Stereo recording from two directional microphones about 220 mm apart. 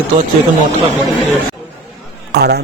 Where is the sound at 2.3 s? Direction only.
50° right (ahead or behind).